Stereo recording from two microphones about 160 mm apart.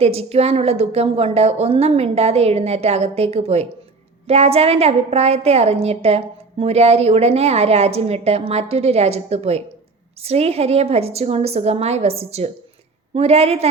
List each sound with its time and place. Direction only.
0.0 s a woman's voice: 40° right (ahead or behind)